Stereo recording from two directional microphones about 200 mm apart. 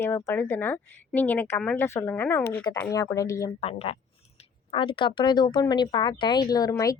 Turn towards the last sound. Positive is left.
turn(degrees=15)  # may be behind; listen again after turning